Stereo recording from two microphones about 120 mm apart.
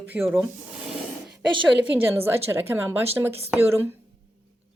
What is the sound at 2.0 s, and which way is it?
A woman's voice, 20° right (ahead or behind).